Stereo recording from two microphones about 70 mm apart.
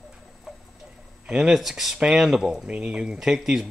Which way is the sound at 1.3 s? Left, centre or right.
Centre.